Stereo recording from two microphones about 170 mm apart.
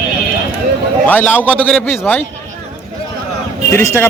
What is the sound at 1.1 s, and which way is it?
A man's voice, 10° left (ahead or behind).